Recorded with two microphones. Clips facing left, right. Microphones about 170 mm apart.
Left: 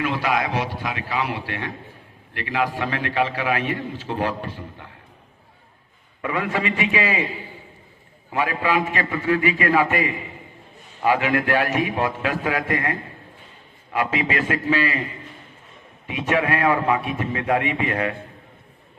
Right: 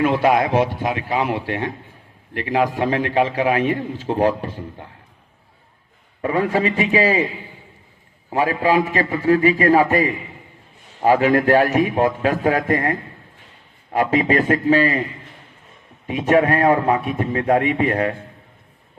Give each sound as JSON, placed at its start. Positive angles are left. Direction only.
{"t": 0.0, "sound": "a man's voice", "side_deg": -50}
{"t": 6.2, "sound": "a man's voice", "side_deg": -35}
{"t": 8.3, "sound": "a man's voice", "side_deg": -35}
{"t": 16.0, "sound": "a man's voice", "side_deg": -40}